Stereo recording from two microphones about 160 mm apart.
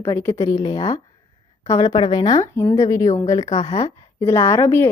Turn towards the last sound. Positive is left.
turn(degrees=15)  # may be behind; listen again after turning